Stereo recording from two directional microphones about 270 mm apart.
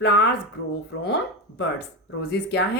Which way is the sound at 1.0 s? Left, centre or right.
Left.